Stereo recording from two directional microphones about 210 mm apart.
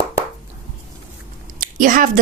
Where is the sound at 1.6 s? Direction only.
40° right (ahead or behind).